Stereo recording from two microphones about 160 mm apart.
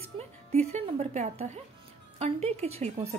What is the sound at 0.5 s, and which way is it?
A woman's voice, 40° right (ahead or behind).